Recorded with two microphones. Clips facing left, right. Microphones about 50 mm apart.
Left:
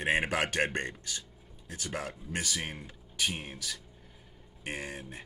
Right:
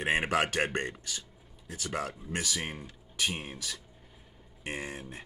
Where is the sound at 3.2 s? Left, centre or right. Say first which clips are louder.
Right 1 dB; centre.